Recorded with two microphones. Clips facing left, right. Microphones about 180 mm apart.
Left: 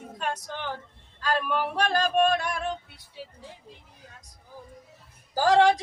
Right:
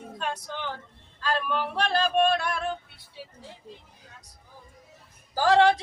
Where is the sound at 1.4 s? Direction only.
10° left (ahead or behind).